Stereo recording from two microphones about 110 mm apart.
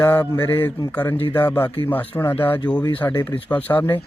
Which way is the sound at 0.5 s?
20° left (ahead or behind).